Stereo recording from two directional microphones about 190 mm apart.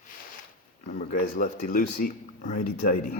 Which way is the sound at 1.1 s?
50° left (ahead or behind).